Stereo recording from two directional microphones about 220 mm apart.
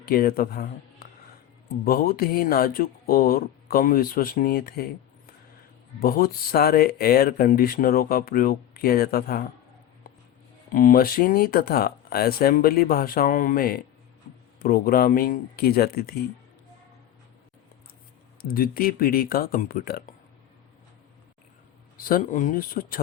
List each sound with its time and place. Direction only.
0.0 s speech: 40° left (ahead or behind)
10.7 s speech: 40° left (ahead or behind)
18.4 s speech: 40° left (ahead or behind)
21.9 s speech: 40° left (ahead or behind)